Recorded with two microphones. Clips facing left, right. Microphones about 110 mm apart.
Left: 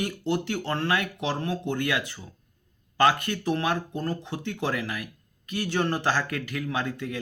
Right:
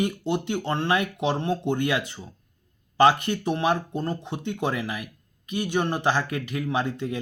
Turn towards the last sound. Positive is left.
turn(degrees=-25)  # may be behind; listen again after turning